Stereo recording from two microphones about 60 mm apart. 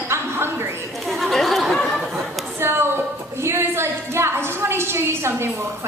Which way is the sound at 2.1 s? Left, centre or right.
Right.